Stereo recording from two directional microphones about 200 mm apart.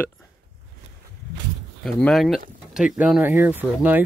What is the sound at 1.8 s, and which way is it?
Speech, 5° left (ahead or behind).